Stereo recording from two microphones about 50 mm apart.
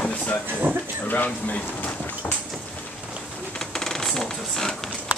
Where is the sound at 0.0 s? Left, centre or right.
Left.